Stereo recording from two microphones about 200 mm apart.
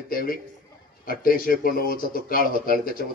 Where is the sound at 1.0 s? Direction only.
45° left (ahead or behind).